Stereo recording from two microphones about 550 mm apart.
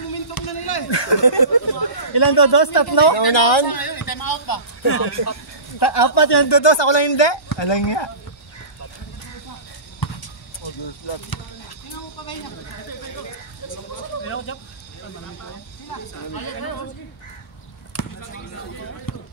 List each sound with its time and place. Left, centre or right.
0.3 s speech: left
3.6 s a sound: left
4.8 s a man's voice: left
5.8 s speech: left
9.9 s basketball bounce: left
14.2 s a sound: left
15.9 s speech: left
19.1 s basketball bounce: left